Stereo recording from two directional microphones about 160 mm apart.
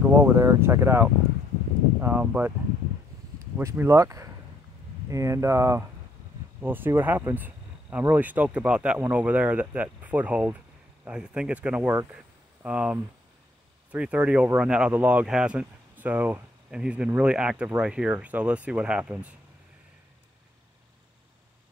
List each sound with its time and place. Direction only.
0.2 s speech: 15° right (ahead or behind)
3.5 s speech: 15° right (ahead or behind)